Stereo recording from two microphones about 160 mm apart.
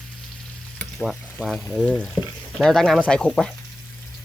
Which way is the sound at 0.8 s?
Centre (ahead or behind).